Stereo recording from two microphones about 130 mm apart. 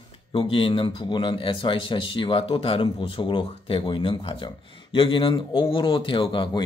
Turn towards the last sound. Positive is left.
turn(degrees=40)  # may be behind; listen again after turning